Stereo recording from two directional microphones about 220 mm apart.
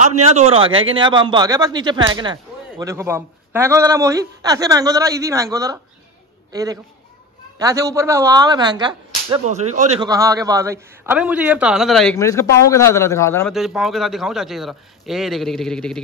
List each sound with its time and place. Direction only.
0.0 s a man's voice: 30° right (ahead or behind)
10.0 s a man's voice: 15° right (ahead or behind); by 12.2 s centre (ahead or behind)
12.2 s a man's voice: 15° left (ahead or behind)
13.5 s speech: centre (ahead or behind)